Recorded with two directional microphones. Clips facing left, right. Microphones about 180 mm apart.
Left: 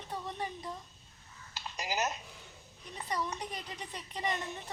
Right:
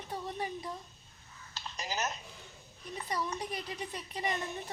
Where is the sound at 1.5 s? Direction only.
10° left (ahead or behind).